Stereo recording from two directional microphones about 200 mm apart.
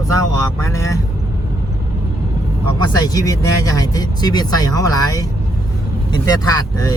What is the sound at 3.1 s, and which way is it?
Speech, 20° left (ahead or behind).